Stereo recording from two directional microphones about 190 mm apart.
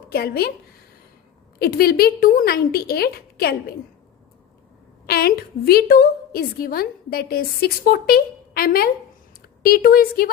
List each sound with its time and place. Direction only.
0.1 s a woman's voice: 55° left (ahead or behind)
1.5 s a woman's voice: 55° left (ahead or behind)
5.0 s a woman's voice: 55° left (ahead or behind)